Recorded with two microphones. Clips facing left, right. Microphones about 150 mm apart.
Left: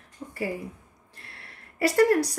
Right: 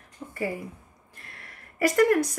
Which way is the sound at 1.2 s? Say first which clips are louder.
Right 1 dB; 30° left (ahead or behind).